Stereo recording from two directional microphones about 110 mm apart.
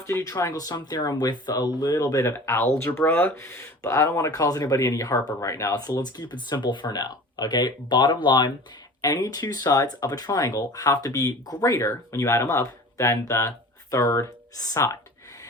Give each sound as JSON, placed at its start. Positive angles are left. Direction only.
{"t": 0.0, "sound": "speech", "side_deg": 25}
{"t": 2.3, "sound": "speech", "side_deg": 20}